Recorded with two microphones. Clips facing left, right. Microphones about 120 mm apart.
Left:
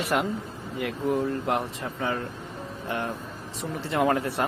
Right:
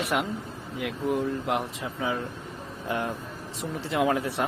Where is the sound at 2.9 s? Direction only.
15° right (ahead or behind).